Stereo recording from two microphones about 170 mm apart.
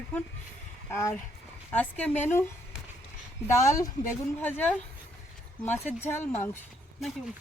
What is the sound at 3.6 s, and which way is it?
A woman's voice, 20° left (ahead or behind).